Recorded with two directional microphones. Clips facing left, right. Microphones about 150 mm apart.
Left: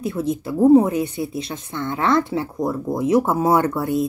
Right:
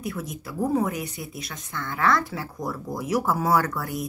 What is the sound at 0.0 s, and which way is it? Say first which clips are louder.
Speech: left 9 dB; 25° left (ahead or behind).